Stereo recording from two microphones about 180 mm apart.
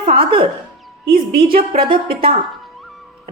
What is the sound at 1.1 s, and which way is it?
Speech, 55° right (ahead or behind).